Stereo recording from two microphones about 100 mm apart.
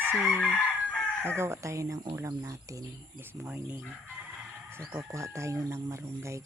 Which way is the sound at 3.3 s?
10° right (ahead or behind).